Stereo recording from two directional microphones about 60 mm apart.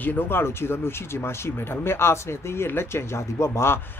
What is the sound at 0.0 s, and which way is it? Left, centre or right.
Speech, left.